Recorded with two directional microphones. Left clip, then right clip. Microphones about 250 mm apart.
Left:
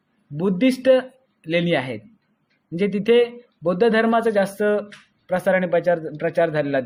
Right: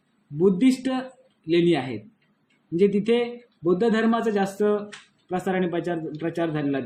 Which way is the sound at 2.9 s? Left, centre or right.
Left.